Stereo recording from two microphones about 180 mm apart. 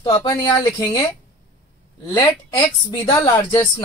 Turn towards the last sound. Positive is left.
turn(degrees=15)  # may be behind; listen again after turning